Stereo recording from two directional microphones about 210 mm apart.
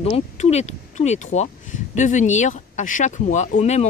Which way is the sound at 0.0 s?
30° left (ahead or behind).